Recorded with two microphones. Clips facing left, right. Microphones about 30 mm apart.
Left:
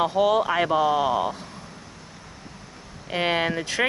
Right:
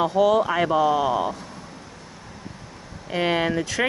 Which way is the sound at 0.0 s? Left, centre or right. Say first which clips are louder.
Right 2 dB; left.